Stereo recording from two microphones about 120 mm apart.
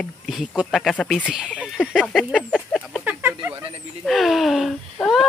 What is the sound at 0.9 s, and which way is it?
Speech, 10° left (ahead or behind).